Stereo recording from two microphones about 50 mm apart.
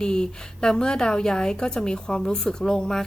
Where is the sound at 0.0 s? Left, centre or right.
Centre.